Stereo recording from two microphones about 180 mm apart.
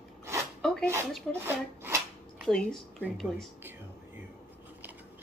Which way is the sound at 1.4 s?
10° right (ahead or behind).